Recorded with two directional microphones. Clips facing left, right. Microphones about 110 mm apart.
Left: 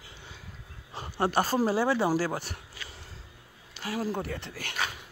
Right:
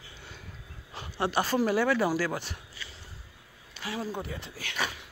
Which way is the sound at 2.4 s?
55° left (ahead or behind).